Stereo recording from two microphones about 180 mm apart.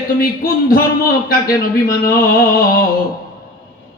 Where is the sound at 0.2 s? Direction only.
55° left (ahead or behind).